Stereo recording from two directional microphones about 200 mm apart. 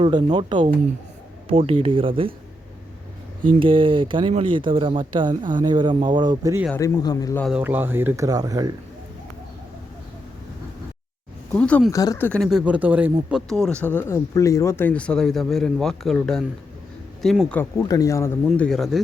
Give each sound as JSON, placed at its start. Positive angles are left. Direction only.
{"t": 0.0, "sound": "speech", "side_deg": -20}
{"t": 3.4, "sound": "speech", "side_deg": -25}
{"t": 6.7, "sound": "speech", "side_deg": 15}
{"t": 7.4, "sound": "speech", "side_deg": -5}
{"t": 11.5, "sound": "speech", "side_deg": 5}
{"t": 13.5, "sound": "speech", "side_deg": 0}
{"t": 18.4, "sound": "speech", "side_deg": 5}